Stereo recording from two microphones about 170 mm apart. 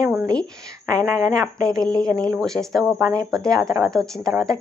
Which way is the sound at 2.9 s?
15° right (ahead or behind).